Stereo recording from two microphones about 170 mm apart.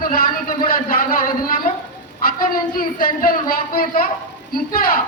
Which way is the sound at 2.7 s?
60° left (ahead or behind).